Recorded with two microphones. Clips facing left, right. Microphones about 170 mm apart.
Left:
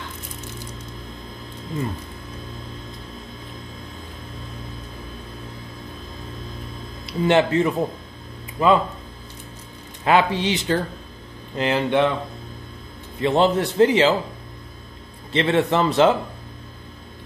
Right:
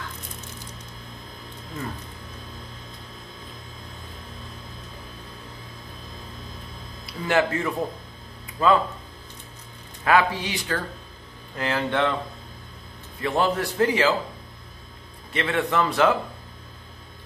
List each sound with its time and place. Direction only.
7.2 s a man's voice: 20° left (ahead or behind)
10.0 s a man's voice: 25° left (ahead or behind)
13.2 s a man's voice: 25° left (ahead or behind)
15.3 s a man's voice: 30° left (ahead or behind)